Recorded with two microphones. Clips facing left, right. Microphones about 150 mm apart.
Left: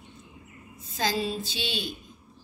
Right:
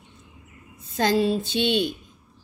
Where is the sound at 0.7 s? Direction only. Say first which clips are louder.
Right 7 dB; 60° right (ahead or behind).